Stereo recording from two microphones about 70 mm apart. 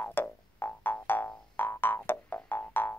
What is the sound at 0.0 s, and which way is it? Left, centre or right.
Music, left.